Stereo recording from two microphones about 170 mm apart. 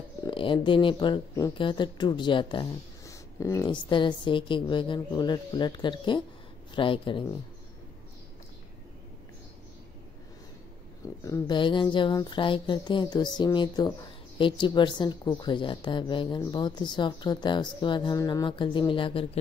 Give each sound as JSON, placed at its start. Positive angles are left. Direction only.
{"t": 0.2, "sound": "speech", "side_deg": 30}
{"t": 11.2, "sound": "speech", "side_deg": 25}